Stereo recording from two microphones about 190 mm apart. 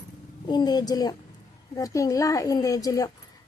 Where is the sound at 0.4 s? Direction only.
20° left (ahead or behind).